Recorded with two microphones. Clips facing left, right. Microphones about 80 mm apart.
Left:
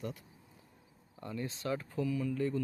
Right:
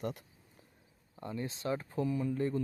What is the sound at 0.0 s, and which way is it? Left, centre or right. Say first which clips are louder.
Speech: right 3 dB; right.